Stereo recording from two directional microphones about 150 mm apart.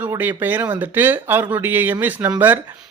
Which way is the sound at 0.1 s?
15° right (ahead or behind).